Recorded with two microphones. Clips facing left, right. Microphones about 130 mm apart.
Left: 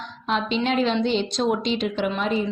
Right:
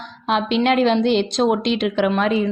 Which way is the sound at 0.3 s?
70° right (ahead or behind).